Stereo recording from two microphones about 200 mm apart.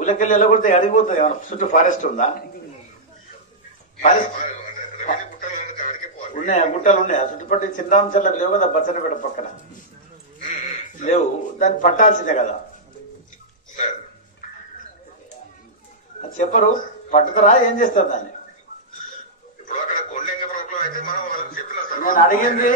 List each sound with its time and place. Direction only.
0.0 s a man's voice: 40° left (ahead or behind)
4.0 s a man's voice: 40° left (ahead or behind)
16.2 s a man's voice: 40° left (ahead or behind)
19.7 s a sound: 40° left (ahead or behind)